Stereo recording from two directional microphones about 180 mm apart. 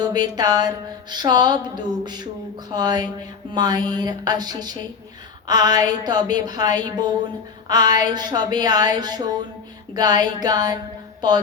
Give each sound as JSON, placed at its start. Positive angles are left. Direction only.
{"t": 0.0, "sound": "speech", "side_deg": -20}
{"t": 2.7, "sound": "speech", "side_deg": -20}